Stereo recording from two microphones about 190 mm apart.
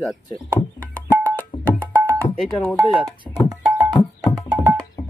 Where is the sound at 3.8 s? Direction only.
20° right (ahead or behind).